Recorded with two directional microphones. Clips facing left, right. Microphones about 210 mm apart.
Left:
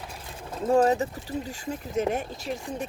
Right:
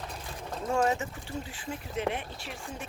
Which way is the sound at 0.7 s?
35° left (ahead or behind).